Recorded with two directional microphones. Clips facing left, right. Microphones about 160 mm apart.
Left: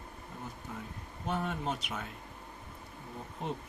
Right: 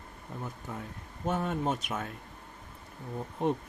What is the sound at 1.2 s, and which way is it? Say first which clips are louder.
Speech: right 4 dB; 45° right (ahead or behind).